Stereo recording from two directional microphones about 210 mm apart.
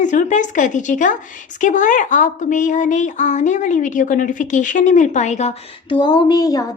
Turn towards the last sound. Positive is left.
turn(degrees=15)  # may be behind; listen again after turning